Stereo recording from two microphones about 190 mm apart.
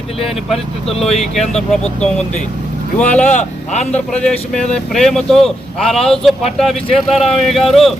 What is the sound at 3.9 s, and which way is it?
Speech, 5° left (ahead or behind).